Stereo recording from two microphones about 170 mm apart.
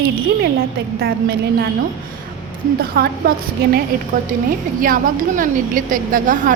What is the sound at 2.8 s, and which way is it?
Speech, 65° right (ahead or behind).